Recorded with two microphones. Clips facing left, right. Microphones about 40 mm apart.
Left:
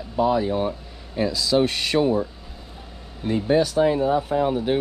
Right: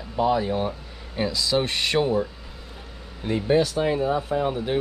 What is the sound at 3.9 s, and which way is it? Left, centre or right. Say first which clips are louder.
Speech: left 3 dB; centre.